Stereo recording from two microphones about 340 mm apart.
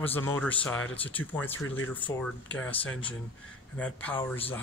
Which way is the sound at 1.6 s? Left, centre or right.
Left.